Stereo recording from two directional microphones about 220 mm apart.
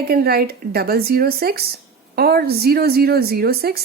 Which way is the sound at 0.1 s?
45° right (ahead or behind).